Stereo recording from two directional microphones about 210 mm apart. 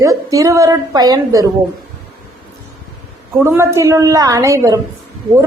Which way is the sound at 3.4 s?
10° right (ahead or behind).